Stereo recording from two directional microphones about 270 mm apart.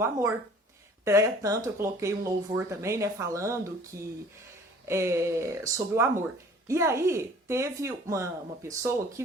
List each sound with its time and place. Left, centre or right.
0.0 s speech: centre